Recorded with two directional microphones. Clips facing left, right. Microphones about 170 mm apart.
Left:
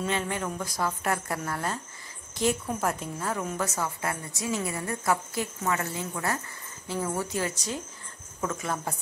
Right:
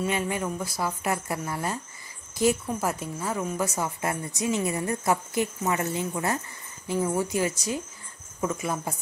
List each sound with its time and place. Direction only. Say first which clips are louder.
0.0 s a woman's voice: right 2 dB; 10° right (ahead or behind)